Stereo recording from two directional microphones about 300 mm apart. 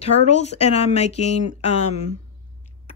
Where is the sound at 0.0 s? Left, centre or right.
Left.